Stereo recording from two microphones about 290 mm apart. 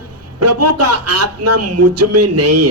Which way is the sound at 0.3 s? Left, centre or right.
Right.